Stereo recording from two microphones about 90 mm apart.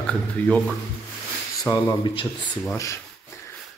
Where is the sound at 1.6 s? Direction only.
40° left (ahead or behind).